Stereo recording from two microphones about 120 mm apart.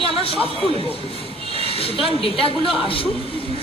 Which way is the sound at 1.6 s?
50° left (ahead or behind).